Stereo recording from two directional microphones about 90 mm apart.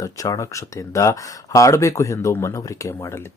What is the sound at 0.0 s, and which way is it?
Speech, 40° left (ahead or behind).